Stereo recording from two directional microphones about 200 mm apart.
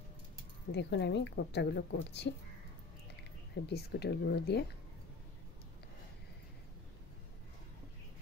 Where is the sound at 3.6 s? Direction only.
55° left (ahead or behind).